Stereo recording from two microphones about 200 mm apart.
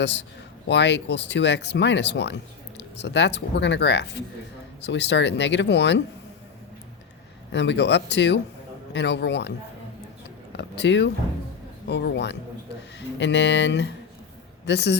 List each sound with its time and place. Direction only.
0.0 s speech: 60° left (ahead or behind)
7.5 s speech: 60° left (ahead or behind)
10.5 s a man's voice: 60° left (ahead or behind)